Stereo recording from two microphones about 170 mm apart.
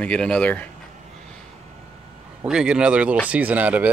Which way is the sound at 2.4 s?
5° right (ahead or behind).